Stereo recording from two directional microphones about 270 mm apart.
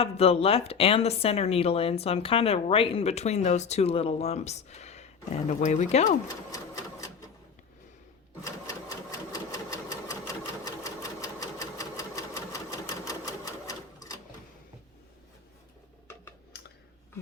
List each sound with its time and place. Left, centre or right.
0.0 s speech: left
6.2 s sewing machine: centre
8.4 s sewing machine: centre
16.5 s clicking: left